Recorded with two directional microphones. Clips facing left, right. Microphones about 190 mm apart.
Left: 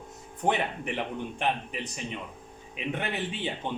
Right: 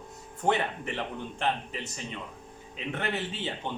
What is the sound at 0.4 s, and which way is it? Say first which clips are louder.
A man's voice: even; 15° left (ahead or behind).